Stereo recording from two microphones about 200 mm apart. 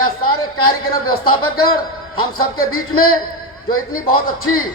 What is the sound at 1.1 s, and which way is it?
Speech, 90° left.